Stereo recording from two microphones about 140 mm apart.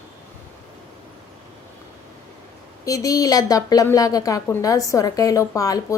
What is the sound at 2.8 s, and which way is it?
Speech, 25° left (ahead or behind).